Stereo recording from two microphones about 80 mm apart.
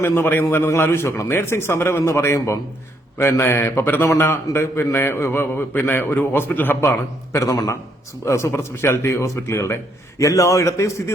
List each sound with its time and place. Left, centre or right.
0.0 s a man's voice: left
7.3 s a man's voice: left